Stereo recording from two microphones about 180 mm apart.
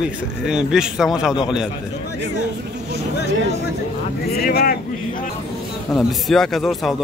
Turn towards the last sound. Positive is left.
turn(degrees=0)  # may be behind; listen again after turning